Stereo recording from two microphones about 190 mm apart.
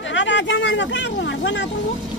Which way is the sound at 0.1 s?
70° left (ahead or behind).